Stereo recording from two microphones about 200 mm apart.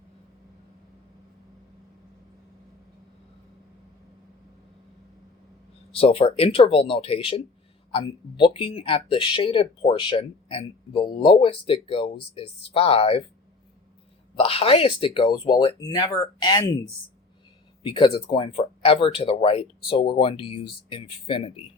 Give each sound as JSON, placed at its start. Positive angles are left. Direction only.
{"t": 5.9, "sound": "speech", "side_deg": 30}
{"t": 14.3, "sound": "speech", "side_deg": 30}
{"t": 17.8, "sound": "speech", "side_deg": 25}